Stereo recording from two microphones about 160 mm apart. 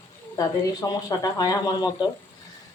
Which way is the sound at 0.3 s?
20° left (ahead or behind).